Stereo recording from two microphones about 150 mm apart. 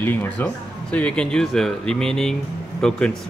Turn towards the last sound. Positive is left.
turn(degrees=5)  # may be behind; listen again after turning